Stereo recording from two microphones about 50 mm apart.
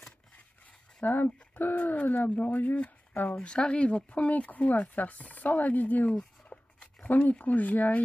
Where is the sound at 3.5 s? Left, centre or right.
Centre; by 6.1 s left.